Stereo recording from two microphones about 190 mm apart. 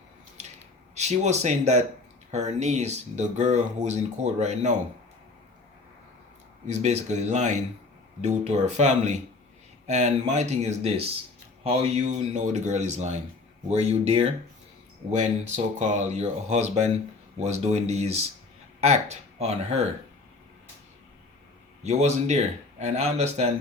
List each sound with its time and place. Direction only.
0.9 s speech: 35° right (ahead or behind)
6.7 s speech: 40° right (ahead or behind)
21.8 s speech: 35° right (ahead or behind)